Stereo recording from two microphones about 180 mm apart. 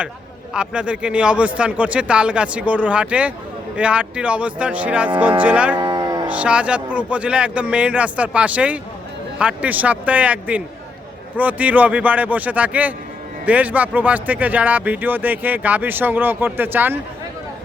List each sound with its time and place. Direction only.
0.5 s speech: 5° right (ahead or behind)
5.7 s cattle: 25° right (ahead or behind)
6.2 s speech: 5° right (ahead or behind)